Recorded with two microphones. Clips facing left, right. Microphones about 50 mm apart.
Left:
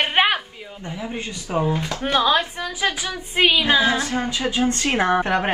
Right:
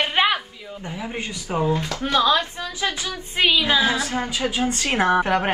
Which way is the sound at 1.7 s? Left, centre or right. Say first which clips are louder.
Even; left.